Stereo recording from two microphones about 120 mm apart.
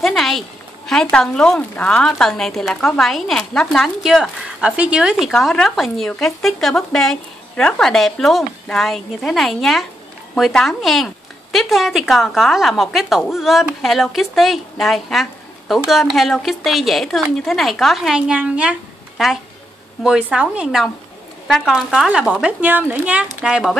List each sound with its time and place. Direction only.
0.0 s speech: centre (ahead or behind)
5.3 s speech: 5° left (ahead or behind)